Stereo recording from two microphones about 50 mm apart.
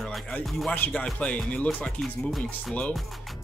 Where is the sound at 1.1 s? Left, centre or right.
Left.